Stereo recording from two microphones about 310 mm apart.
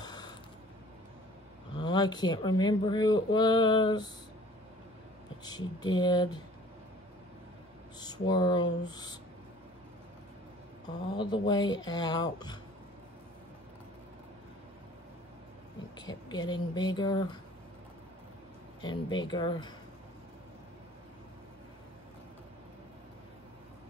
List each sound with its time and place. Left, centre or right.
0.0 s mechanisms: centre
1.8 s speech: centre
5.4 s speech: centre
8.0 s speech: centre
11.1 s speech: centre
16.0 s speech: centre
18.8 s speech: centre